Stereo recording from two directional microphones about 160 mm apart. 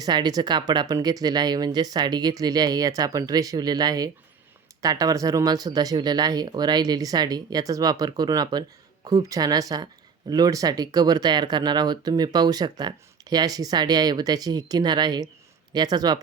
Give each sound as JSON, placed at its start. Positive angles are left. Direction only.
{"t": 0.0, "sound": "speech", "side_deg": -25}